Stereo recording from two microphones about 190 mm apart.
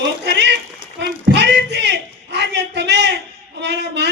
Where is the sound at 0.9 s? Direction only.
65° right (ahead or behind).